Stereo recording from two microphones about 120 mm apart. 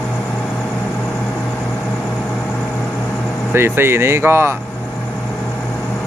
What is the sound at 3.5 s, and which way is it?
Speech, 20° right (ahead or behind).